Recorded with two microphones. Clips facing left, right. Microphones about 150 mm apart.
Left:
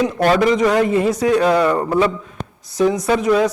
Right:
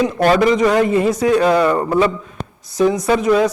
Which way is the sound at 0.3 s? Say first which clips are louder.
Right 1 dB; 15° right (ahead or behind).